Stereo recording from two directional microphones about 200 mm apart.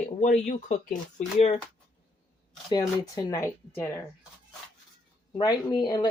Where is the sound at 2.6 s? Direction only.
20° left (ahead or behind).